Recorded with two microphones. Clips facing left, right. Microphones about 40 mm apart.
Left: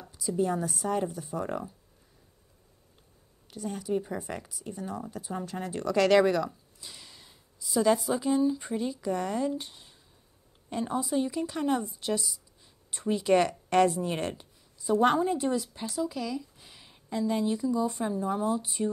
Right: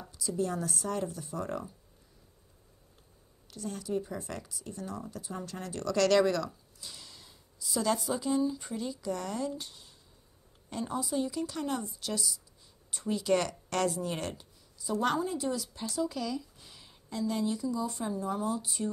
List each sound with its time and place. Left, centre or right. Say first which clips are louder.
0.1 s speech: left 4 dB; centre
3.5 s speech: left 3 dB; centre
16.0 s a woman's voice: left 1 dB; centre